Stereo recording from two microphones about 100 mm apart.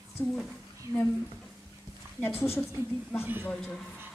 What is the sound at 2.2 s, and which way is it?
Speech, 20° left (ahead or behind).